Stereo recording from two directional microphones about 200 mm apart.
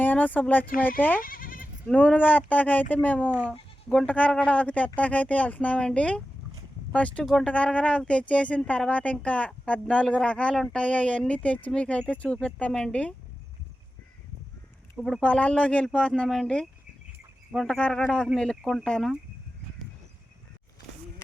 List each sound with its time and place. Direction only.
0.0 s speech: 10° left (ahead or behind)
1.2 s goat: 45° left (ahead or behind)
1.9 s speech: 5° left (ahead or behind)
14.9 s speech: centre (ahead or behind)